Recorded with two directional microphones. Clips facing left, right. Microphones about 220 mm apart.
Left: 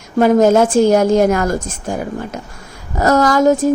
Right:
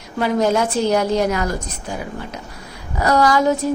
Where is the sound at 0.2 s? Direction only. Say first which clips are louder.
Left 7 dB; 45° left (ahead or behind).